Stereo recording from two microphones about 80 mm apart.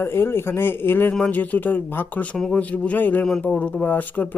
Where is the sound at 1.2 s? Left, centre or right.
Centre.